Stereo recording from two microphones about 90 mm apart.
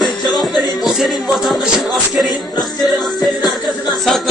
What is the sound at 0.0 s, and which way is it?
Music, 50° left (ahead or behind).